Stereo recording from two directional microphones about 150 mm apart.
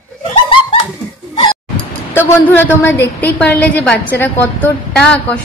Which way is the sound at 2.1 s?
15° left (ahead or behind).